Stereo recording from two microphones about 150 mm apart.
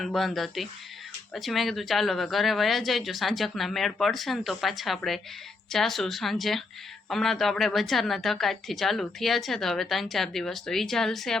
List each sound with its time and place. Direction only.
0.0 s a woman's voice: centre (ahead or behind)